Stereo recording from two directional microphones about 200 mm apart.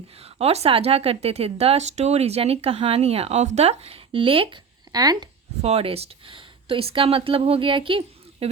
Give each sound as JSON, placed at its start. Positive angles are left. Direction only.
{"t": 0.2, "sound": "speech", "side_deg": -30}
{"t": 5.6, "sound": "speech", "side_deg": -30}